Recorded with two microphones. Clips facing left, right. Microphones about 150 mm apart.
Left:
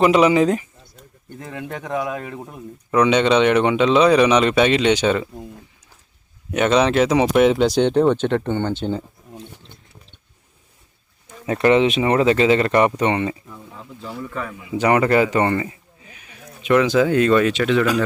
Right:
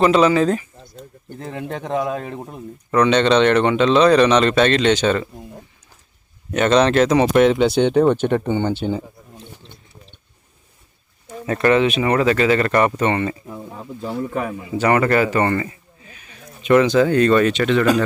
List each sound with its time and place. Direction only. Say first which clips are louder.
0.0 s speech: even; 15° left (ahead or behind)
1.3 s speech: right 2 dB; 30° right (ahead or behind)
2.9 s speech: right 1 dB; 10° left (ahead or behind)
6.5 s speech: right 1 dB; 10° left (ahead or behind); by 9.0 s 10° right (ahead or behind)
11.4 s speech: left 1 dB; 20° left (ahead or behind)
13.5 s a man's voice: right 6 dB; 40° right (ahead or behind)
14.5 s speech: right 2 dB; 40° right (ahead or behind)
14.8 s a sound: even; 15° left (ahead or behind)
16.6 s speech: right 2 dB; centre (ahead or behind)